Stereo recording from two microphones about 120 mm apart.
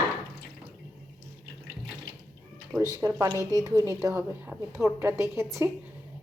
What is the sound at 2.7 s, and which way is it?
A woman's voice, 30° right (ahead or behind).